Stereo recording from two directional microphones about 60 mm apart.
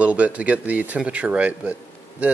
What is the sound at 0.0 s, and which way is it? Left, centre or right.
Speech, right.